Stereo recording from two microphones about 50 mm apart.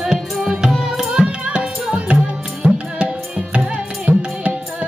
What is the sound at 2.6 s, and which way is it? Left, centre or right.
Music, right.